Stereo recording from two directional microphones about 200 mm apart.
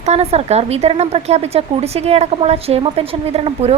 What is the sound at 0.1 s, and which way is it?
A woman's voice, 30° right (ahead or behind).